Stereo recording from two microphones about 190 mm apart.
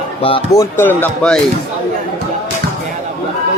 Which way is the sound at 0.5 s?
15° left (ahead or behind).